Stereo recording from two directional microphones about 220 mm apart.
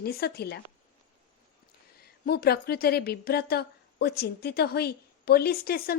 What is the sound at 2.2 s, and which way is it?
A woman's voice, 45° left (ahead or behind).